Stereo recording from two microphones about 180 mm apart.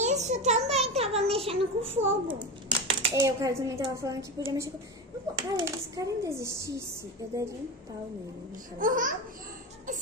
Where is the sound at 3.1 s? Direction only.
15° right (ahead or behind).